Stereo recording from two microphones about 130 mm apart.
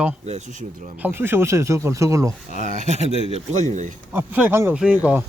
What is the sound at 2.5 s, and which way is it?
Speech, 85° right.